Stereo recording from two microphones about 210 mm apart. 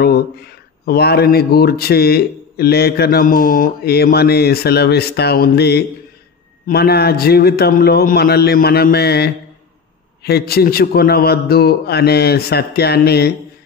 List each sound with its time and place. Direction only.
0.0 s speech: 50° left (ahead or behind)